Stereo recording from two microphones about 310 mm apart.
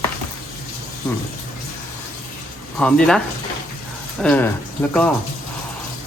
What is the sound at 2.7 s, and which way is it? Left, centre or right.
Speech, centre.